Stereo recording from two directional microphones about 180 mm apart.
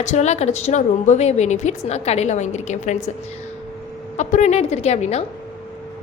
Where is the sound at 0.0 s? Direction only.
40° left (ahead or behind).